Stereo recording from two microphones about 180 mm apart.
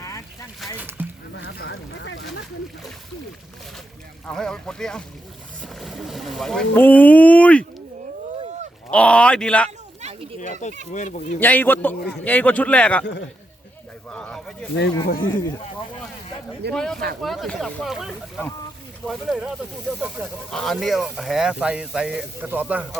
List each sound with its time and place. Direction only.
0.6 s a sound: centre (ahead or behind)
1.0 s a sound: 10° right (ahead or behind)
1.5 s speech: 75° left (ahead or behind); by 2.2 s 90° left
4.3 s speech: 5° left (ahead or behind)
8.9 s speech: 5° left (ahead or behind)
10.9 s speech: 40° left (ahead or behind)
11.3 s speech: 10° left (ahead or behind)
14.1 s speech: 5° left (ahead or behind)
15.0 s speech: 55° left (ahead or behind)
16.7 s speech: 5° left (ahead or behind)
20.5 s speech: centre (ahead or behind)